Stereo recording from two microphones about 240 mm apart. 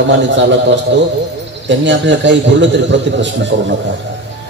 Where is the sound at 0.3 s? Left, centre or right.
Right.